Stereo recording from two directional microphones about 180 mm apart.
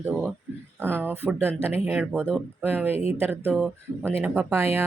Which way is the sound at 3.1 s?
10° right (ahead or behind).